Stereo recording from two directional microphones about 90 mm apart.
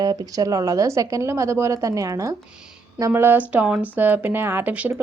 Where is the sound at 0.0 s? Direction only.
50° right (ahead or behind).